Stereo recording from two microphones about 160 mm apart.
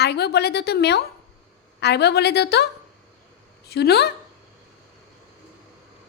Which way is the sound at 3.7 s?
90° left.